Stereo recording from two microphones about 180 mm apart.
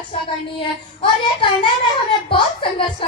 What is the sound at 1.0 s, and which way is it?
Speech, 30° left (ahead or behind).